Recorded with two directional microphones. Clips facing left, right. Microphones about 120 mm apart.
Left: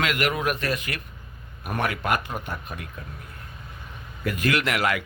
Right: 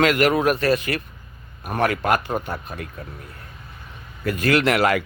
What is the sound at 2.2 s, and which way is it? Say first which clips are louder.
Speech: right 6 dB; 40° right (ahead or behind).